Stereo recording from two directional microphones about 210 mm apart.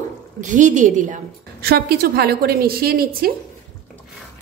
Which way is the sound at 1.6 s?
50° right (ahead or behind).